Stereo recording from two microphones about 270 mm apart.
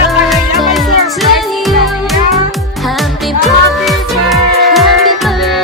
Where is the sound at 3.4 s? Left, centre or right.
Centre.